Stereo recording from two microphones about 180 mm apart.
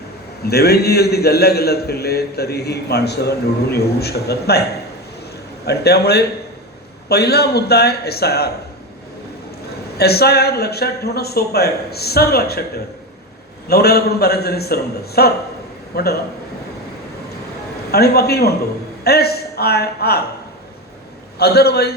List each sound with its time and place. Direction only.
0.4 s a man's voice: 60° left (ahead or behind)
5.6 s a man's voice: 65° left (ahead or behind)
10.0 s a man's voice: 60° left (ahead or behind)
13.7 s a man's voice: 60° left (ahead or behind)
17.9 s a man's voice: 60° left (ahead or behind)
21.3 s a man's voice: 60° left (ahead or behind)